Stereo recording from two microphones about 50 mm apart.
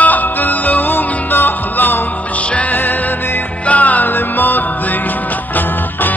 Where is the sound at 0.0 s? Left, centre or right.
Left.